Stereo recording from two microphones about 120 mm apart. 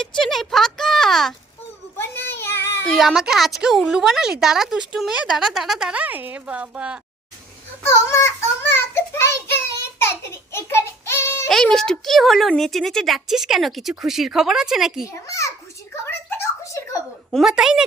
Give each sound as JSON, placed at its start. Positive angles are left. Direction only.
{"t": 0.0, "sound": "a sound", "side_deg": 5}
{"t": 2.0, "sound": "child singing", "side_deg": 15}
{"t": 2.8, "sound": "speech", "side_deg": 0}
{"t": 7.9, "sound": "child singing", "side_deg": 20}
{"t": 10.0, "sound": "a sound", "side_deg": 20}
{"t": 11.4, "sound": "speech", "side_deg": 5}
{"t": 15.0, "sound": "a child's voice", "side_deg": 25}
{"t": 16.0, "sound": "a sound", "side_deg": 20}
{"t": 17.3, "sound": "speech", "side_deg": -5}